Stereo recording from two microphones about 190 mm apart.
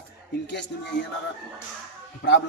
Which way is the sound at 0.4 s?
65° left (ahead or behind).